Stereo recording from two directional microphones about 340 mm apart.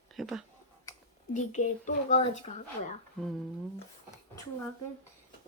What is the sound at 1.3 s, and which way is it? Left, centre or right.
Speech, left.